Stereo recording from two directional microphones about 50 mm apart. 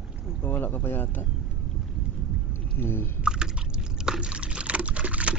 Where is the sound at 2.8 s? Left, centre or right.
Left.